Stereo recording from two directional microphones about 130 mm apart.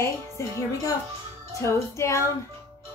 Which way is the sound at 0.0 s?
25° left (ahead or behind).